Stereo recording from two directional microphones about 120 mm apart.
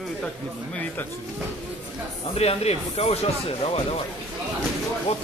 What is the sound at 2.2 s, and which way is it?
Speech, 55° left (ahead or behind).